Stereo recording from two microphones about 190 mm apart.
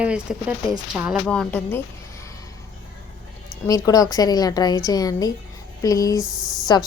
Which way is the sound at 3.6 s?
20° left (ahead or behind).